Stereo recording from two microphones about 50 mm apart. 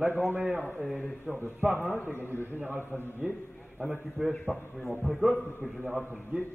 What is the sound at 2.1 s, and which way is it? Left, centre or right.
Speech, left.